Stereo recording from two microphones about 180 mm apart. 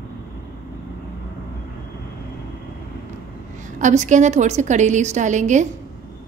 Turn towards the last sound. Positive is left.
turn(degrees=-40)  # may be behind; listen again after turning